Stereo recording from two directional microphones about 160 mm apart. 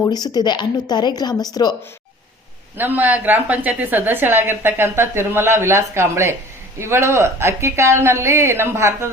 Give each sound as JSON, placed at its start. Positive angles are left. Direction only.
{"t": 0.0, "sound": "speech", "side_deg": 25}
{"t": 2.7, "sound": "a woman's voice", "side_deg": -10}